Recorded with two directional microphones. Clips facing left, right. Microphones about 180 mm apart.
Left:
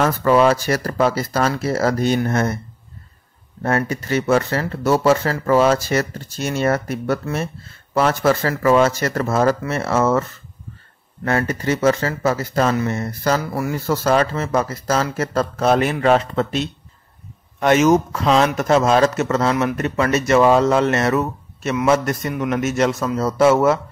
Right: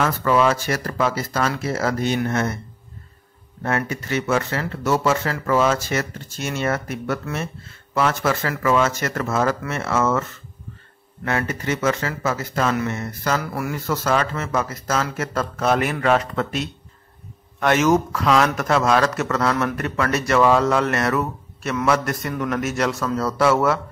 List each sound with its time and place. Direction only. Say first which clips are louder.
0.0 s speech: left 4 dB; 35° left (ahead or behind)
3.6 s speech: left 4 dB; 35° left (ahead or behind)
11.2 s speech: left 4 dB; 35° left (ahead or behind)